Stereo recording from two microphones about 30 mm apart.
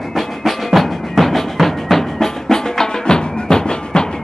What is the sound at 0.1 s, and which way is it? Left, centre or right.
Music, centre.